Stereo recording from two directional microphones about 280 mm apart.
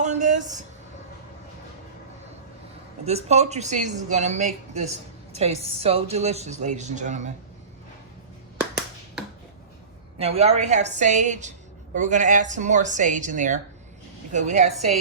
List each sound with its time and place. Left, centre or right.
0.0 s a sound: right
3.1 s a woman's voice: right
10.2 s a woman's voice: right